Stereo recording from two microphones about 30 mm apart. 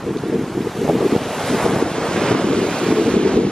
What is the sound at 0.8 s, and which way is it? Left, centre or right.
Waves, centre.